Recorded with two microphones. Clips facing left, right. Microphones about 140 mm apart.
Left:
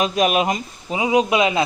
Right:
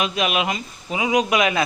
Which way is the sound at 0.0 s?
40° left (ahead or behind).